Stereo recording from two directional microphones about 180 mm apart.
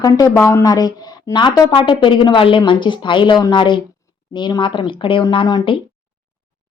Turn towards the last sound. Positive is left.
turn(degrees=25)  # may be behind; listen again after turning